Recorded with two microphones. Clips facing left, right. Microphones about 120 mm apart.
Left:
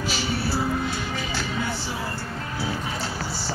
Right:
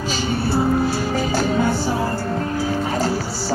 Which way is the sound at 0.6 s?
40° right (ahead or behind).